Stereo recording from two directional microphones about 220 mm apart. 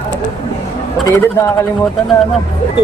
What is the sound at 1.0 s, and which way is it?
Speech, 10° left (ahead or behind).